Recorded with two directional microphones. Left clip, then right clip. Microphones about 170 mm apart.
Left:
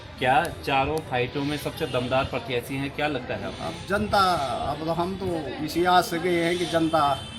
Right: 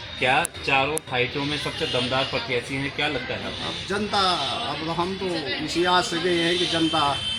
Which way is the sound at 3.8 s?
35° left (ahead or behind).